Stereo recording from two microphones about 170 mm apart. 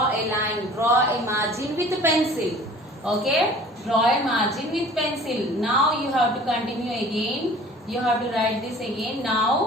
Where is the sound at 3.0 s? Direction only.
5° right (ahead or behind).